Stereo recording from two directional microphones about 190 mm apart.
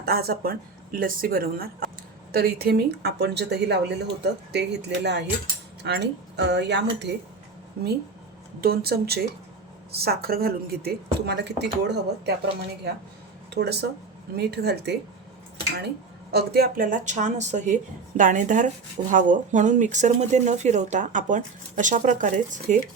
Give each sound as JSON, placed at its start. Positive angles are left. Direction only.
{"t": 0.0, "sound": "speech", "side_deg": -55}
{"t": 8.6, "sound": "speech", "side_deg": -55}
{"t": 13.5, "sound": "speech", "side_deg": -60}
{"t": 16.3, "sound": "speech", "side_deg": -55}